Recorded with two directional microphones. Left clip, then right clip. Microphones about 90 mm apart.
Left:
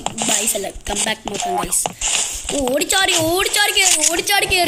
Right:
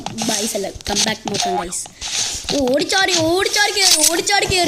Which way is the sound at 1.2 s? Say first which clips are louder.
Right 3 dB; 5° right (ahead or behind).